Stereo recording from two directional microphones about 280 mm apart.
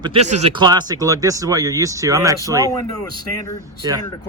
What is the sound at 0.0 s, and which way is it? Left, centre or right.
Speech, right.